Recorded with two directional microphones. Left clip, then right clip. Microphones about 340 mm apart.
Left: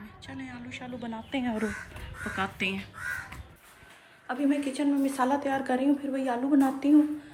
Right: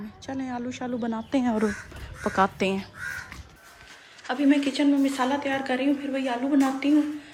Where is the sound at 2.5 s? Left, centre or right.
Centre.